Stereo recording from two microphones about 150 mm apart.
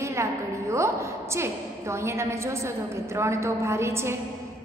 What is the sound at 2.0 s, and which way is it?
A woman's voice, 20° right (ahead or behind).